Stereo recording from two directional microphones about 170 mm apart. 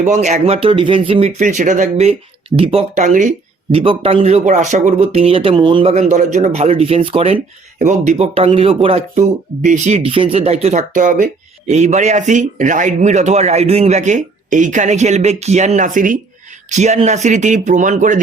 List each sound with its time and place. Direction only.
0.0 s speech: 45° right (ahead or behind)
1.4 s speech: 50° right (ahead or behind)